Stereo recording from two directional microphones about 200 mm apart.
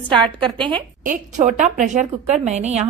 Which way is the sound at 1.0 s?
40° right (ahead or behind).